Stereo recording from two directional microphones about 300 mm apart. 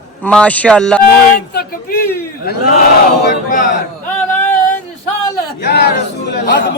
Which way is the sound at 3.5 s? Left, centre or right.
Left.